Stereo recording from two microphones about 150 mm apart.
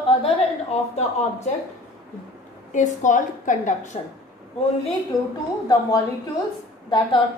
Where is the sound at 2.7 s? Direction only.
55° left (ahead or behind).